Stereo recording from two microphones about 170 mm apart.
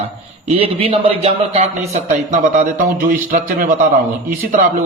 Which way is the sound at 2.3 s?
50° right (ahead or behind).